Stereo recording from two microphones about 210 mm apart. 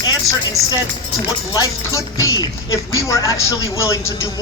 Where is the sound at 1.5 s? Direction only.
15° left (ahead or behind).